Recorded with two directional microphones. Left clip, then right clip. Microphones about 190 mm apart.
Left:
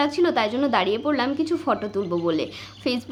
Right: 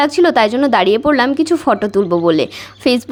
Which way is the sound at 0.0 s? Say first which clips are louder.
Right 10 dB; 45° right (ahead or behind).